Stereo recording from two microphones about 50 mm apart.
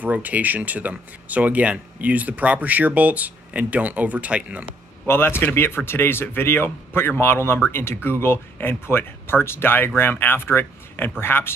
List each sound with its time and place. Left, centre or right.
0.0 s speech: right
5.0 s speech: left